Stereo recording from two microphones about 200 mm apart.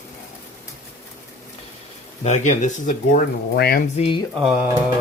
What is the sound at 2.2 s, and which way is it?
Speech, 35° left (ahead or behind).